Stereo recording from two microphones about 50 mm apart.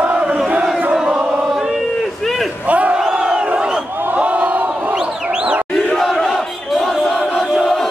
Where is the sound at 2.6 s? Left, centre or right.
Right.